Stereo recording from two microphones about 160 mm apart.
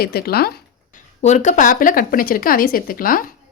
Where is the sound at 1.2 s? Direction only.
50° left (ahead or behind).